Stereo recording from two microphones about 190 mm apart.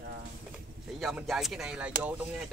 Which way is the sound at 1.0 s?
Centre (ahead or behind).